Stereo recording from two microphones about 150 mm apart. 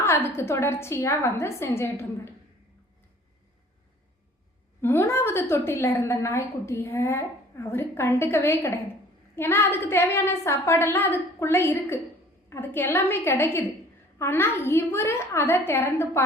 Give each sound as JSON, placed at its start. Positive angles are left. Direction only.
{"t": 0.0, "sound": "a woman's voice", "side_deg": 15}
{"t": 4.8, "sound": "a woman's voice", "side_deg": 15}